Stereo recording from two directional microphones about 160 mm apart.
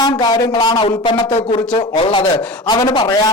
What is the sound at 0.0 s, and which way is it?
A man's voice, 25° left (ahead or behind).